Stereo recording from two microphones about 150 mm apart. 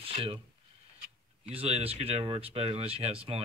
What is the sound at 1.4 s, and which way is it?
Speech, 45° right (ahead or behind).